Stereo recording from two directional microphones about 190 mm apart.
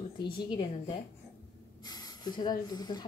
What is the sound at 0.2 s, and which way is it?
Speech, 25° left (ahead or behind).